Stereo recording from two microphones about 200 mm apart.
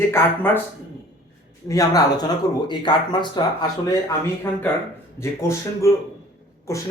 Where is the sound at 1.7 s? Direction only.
15° left (ahead or behind).